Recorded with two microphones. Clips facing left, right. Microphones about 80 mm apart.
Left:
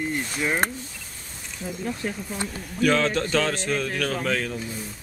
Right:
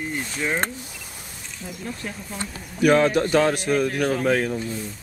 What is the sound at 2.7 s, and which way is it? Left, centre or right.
A man's voice, centre.